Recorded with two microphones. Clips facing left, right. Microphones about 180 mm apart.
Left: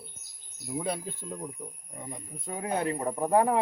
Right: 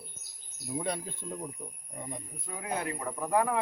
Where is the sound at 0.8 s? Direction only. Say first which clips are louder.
Left 2 dB; 5° left (ahead or behind).